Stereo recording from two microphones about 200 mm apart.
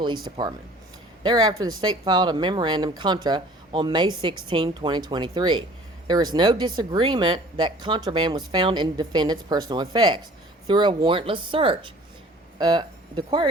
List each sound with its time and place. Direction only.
0.0 s speech: 20° right (ahead or behind)